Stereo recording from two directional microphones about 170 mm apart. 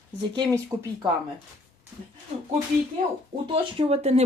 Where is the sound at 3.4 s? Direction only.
35° right (ahead or behind).